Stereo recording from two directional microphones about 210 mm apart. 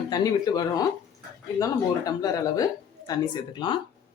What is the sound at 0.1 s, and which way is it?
Speech, 20° left (ahead or behind).